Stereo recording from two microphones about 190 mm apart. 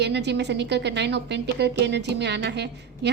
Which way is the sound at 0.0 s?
65° right (ahead or behind).